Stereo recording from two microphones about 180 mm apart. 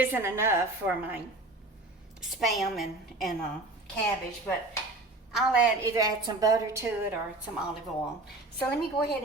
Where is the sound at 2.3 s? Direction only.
Centre (ahead or behind).